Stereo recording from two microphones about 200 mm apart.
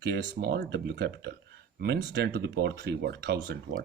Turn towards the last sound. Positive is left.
turn(degrees=-55)  # may be behind; listen again after turning